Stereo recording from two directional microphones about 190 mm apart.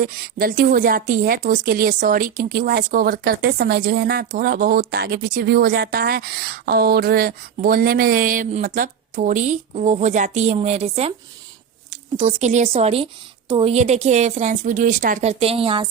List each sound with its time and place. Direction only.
0.0 s a woman's voice: 50° right (ahead or behind); by 15.9 s 30° right (ahead or behind)